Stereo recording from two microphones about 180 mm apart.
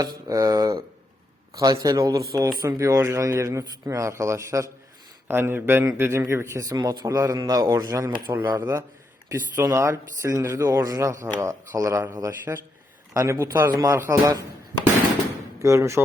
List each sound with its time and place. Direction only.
0.3 s a man's voice: 15° right (ahead or behind)
15.5 s speech: 15° right (ahead or behind)